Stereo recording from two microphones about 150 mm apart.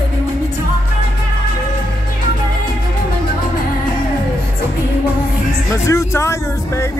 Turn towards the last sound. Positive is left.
turn(degrees=20)  # may be behind; listen again after turning